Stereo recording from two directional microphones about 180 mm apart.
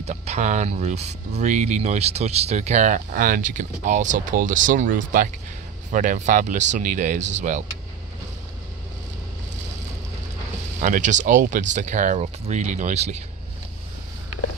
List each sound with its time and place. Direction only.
0.0 s speech: 35° right (ahead or behind)
10.8 s speech: 45° right (ahead or behind)